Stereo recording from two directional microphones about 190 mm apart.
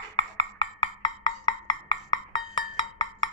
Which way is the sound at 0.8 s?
25° left (ahead or behind).